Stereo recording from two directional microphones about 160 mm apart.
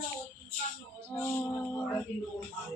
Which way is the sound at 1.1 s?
20° left (ahead or behind).